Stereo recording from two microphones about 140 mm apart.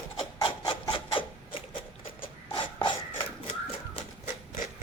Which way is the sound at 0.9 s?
35° left (ahead or behind).